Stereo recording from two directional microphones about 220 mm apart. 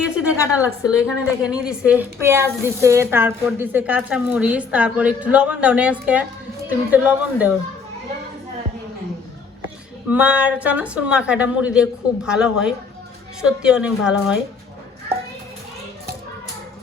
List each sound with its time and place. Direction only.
0.0 s a sound: 5° right (ahead or behind)
0.9 s a woman's voice: 5° right (ahead or behind)
10.1 s a woman's voice: 5° right (ahead or behind)